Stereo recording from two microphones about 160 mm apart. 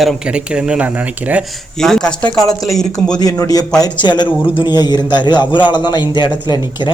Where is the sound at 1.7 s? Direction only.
5° left (ahead or behind).